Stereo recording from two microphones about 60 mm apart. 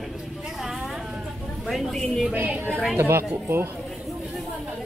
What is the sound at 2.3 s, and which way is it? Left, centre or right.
Speech, right.